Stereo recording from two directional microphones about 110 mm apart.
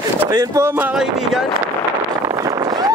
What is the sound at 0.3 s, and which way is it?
Speech, 35° right (ahead or behind).